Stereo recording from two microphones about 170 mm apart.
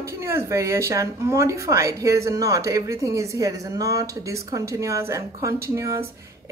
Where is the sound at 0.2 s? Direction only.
15° right (ahead or behind).